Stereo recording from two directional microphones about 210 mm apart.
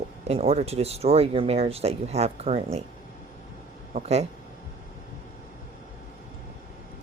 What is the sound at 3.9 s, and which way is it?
Speech, 30° right (ahead or behind).